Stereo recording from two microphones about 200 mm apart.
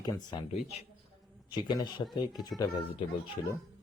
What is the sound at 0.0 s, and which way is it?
Speech, 20° left (ahead or behind).